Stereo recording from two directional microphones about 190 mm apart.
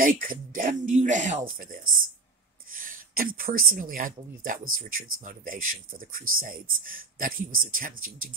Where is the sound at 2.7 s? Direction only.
45° right (ahead or behind).